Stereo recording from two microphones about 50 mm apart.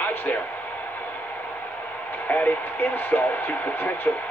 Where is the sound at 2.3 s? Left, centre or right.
Left.